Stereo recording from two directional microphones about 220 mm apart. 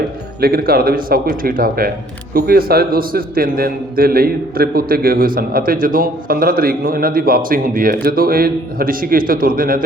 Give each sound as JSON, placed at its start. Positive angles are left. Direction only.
{"t": 0.4, "sound": "a man's voice", "side_deg": -45}